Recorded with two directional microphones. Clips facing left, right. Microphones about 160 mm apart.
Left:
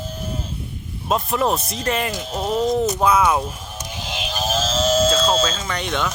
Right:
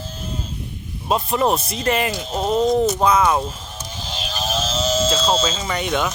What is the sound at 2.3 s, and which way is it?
Speech, 25° right (ahead or behind).